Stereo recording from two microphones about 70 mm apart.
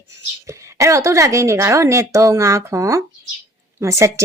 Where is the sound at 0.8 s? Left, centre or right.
Right.